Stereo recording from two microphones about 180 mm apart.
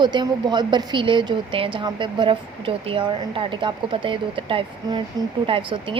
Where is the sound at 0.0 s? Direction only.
25° right (ahead or behind).